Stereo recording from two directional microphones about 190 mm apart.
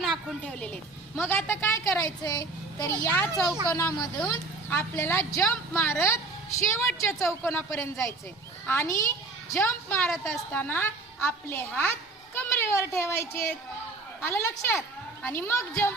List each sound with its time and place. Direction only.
0.0 s a woman's voice: centre (ahead or behind)